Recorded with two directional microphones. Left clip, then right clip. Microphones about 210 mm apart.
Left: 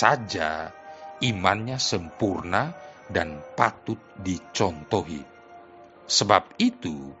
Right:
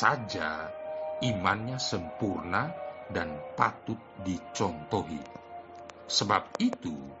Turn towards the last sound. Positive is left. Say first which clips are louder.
# left 5 dB
turn(degrees=40)  # may be behind; listen again after turning